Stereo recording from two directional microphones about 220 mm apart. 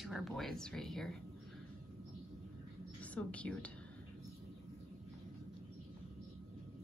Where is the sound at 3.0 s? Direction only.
5° left (ahead or behind).